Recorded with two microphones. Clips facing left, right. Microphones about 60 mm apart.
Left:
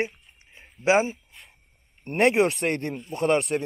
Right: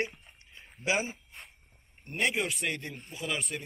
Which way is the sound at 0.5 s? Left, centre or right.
Left.